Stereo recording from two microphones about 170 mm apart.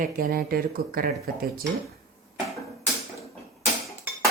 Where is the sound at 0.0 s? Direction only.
60° right (ahead or behind).